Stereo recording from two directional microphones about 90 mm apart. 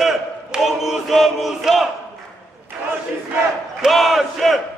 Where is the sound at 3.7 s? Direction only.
Centre (ahead or behind).